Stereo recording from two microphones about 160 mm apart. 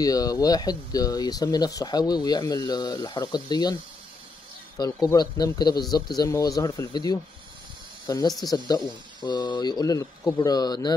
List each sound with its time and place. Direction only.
0.0 s speech: 25° left (ahead or behind)
4.7 s speech: 25° left (ahead or behind)